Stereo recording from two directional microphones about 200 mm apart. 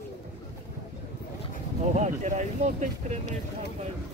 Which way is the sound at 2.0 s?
35° right (ahead or behind).